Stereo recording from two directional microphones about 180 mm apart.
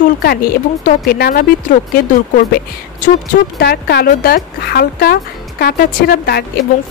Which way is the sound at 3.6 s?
60° left (ahead or behind).